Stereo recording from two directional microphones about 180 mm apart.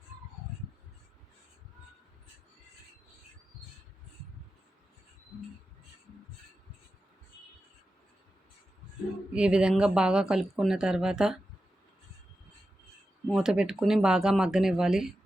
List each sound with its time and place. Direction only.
9.3 s speech: 5° right (ahead or behind)
13.2 s speech: 5° right (ahead or behind)